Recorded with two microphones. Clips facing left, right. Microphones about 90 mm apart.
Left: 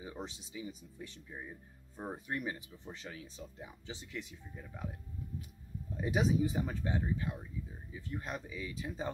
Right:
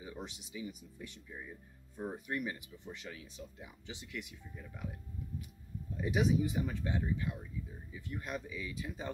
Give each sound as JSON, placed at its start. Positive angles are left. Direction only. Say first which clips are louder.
{"t": 0.0, "sound": "speech", "louder": "left 1 dB", "side_deg": 30}
{"t": 6.0, "sound": "speech", "louder": "even", "side_deg": 35}